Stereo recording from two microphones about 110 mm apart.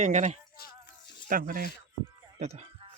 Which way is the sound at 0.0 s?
90° right.